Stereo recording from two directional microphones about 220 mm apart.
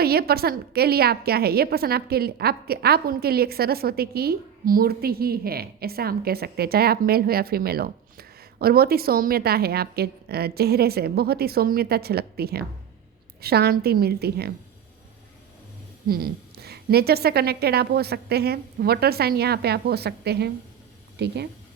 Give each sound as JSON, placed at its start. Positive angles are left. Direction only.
{"t": 0.0, "sound": "a woman's voice", "side_deg": -45}
{"t": 16.0, "sound": "a woman's voice", "side_deg": -45}